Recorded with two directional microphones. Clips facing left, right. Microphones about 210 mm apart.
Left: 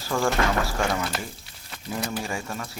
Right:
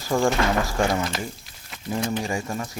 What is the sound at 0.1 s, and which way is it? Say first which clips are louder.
Speech: right 3 dB; 20° right (ahead or behind).